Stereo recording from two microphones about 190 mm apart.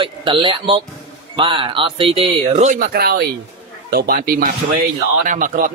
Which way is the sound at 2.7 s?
50° right (ahead or behind).